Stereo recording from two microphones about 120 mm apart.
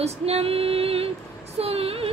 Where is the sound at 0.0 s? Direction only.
55° right (ahead or behind).